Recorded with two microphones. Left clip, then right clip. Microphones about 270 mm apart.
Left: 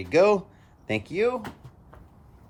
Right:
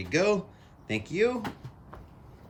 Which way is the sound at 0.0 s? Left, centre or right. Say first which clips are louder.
Left 6 dB; centre.